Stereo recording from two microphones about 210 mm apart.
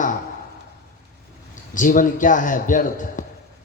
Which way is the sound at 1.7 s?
40° left (ahead or behind).